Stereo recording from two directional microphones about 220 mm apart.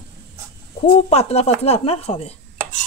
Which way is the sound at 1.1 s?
30° left (ahead or behind).